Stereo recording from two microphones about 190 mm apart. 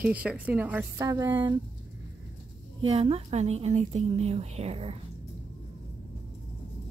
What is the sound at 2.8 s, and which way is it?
A woman's voice, 30° right (ahead or behind).